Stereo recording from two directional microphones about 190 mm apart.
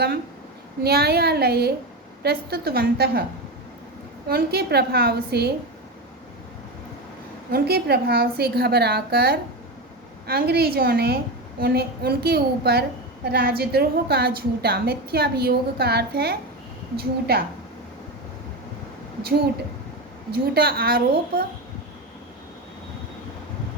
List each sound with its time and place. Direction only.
0.9 s a woman's voice: 55° right (ahead or behind)
4.3 s a woman's voice: 55° right (ahead or behind)
7.5 s a woman's voice: 55° right (ahead or behind)
20.3 s a woman's voice: 55° right (ahead or behind)